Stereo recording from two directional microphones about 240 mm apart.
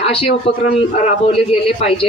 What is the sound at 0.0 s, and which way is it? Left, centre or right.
Speech, left.